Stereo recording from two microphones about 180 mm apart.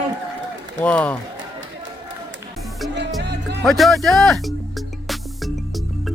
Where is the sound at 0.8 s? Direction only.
10° left (ahead or behind).